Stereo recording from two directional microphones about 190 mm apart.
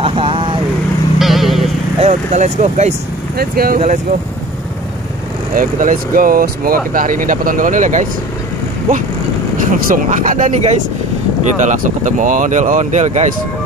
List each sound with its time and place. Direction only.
0.0 s vehicle: 30° right (ahead or behind)
1.2 s vehicle: centre (ahead or behind)
2.0 s speech: 35° right (ahead or behind)
3.3 s speech: 50° right (ahead or behind)
5.6 s speech: 45° right (ahead or behind)
9.7 s speech: 45° right (ahead or behind)